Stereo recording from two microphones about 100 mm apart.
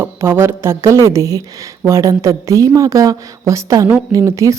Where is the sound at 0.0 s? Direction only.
25° right (ahead or behind).